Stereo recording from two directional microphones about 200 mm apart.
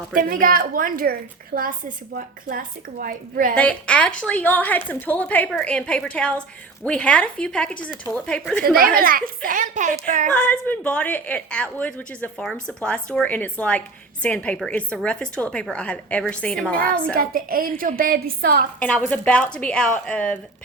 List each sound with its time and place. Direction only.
0.1 s a woman's voice: 45° right (ahead or behind)
3.5 s a woman's voice: 5° left (ahead or behind)
8.6 s a woman's voice: 50° right (ahead or behind)
10.2 s a woman's voice: 5° left (ahead or behind)
17.2 s a woman's voice: 45° right (ahead or behind)
18.8 s a woman's voice: 5° left (ahead or behind)